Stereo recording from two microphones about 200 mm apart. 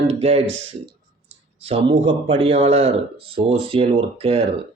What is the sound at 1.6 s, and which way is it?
A man's voice, 30° right (ahead or behind).